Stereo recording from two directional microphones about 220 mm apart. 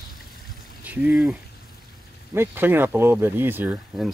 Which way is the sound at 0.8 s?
5° right (ahead or behind).